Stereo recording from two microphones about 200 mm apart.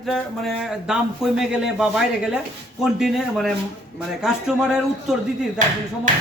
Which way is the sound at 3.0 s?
Centre (ahead or behind).